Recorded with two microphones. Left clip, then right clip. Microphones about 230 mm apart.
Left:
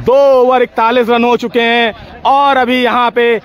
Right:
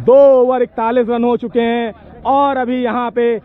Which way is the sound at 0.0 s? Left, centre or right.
Centre.